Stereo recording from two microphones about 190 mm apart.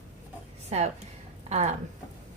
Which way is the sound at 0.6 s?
35° right (ahead or behind).